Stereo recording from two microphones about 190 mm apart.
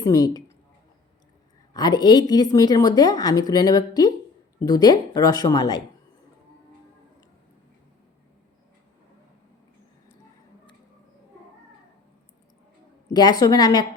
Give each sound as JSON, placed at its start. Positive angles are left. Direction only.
{"t": 0.0, "sound": "speech", "side_deg": 20}
{"t": 1.7, "sound": "a woman's voice", "side_deg": 20}
{"t": 13.1, "sound": "a woman's voice", "side_deg": 20}